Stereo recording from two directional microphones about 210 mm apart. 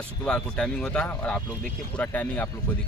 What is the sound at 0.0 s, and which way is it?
Speech, 5° left (ahead or behind).